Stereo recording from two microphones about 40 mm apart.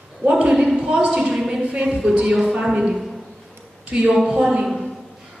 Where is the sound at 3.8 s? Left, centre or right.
Right.